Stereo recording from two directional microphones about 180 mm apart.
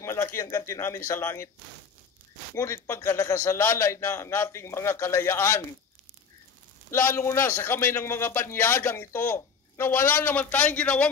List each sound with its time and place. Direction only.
0.0 s speech: 15° left (ahead or behind)
2.5 s speech: 15° left (ahead or behind)
6.9 s speech: 15° left (ahead or behind)